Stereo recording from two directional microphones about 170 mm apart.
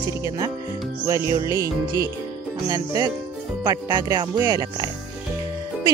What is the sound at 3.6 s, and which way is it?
Speech, 25° right (ahead or behind).